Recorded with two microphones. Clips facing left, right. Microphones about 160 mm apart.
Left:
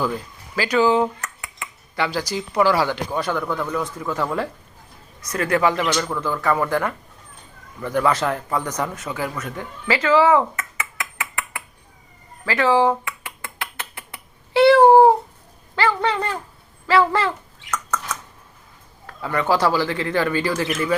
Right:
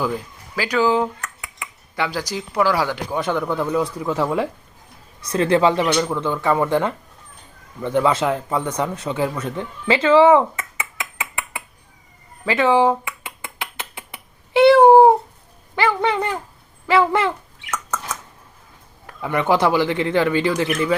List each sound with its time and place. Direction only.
0.7 s speech: centre (ahead or behind)
1.5 s a sound: 15° right (ahead or behind)
2.3 s speech: centre (ahead or behind)
2.7 s speech: 10° right (ahead or behind)
5.2 s speech: 25° right (ahead or behind)
12.5 s a sound: 20° right (ahead or behind)
19.0 s speech: 20° right (ahead or behind)